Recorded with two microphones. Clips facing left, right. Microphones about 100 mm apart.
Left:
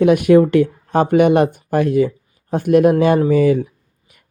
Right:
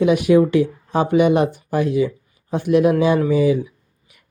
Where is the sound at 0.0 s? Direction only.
50° left (ahead or behind).